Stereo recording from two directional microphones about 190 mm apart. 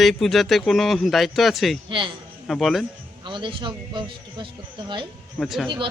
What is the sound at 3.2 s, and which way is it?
Speech, 25° right (ahead or behind).